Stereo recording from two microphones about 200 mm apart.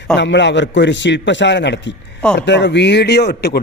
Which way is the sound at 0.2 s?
60° left (ahead or behind).